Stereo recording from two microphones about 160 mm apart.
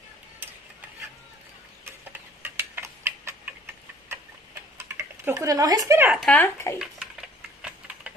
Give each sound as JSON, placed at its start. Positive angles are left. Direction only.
{"t": 2.4, "sound": "tick-tock", "side_deg": -15}
{"t": 4.7, "sound": "typing", "side_deg": -15}
{"t": 6.3, "sound": "speech", "side_deg": 15}
{"t": 6.8, "sound": "typing", "side_deg": -5}